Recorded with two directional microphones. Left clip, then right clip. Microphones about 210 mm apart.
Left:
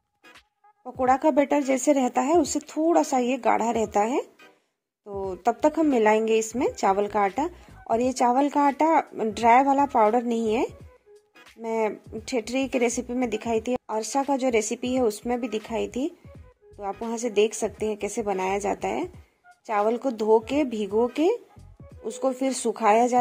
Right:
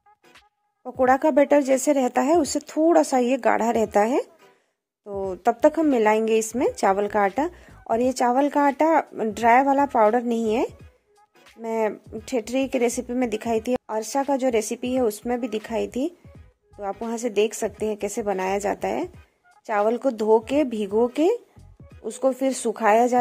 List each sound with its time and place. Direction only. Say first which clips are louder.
0.8 s speech: right 2 dB; 20° right (ahead or behind)